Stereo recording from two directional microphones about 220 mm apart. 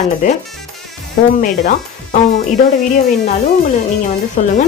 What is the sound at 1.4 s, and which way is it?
Speech, 35° left (ahead or behind).